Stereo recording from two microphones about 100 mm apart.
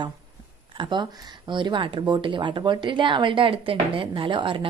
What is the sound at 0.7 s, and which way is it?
A woman's voice, 55° right (ahead or behind).